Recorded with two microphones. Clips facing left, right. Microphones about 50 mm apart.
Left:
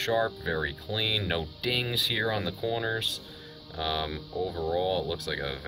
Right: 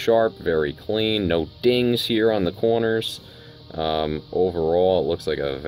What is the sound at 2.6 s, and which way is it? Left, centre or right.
Speech, centre.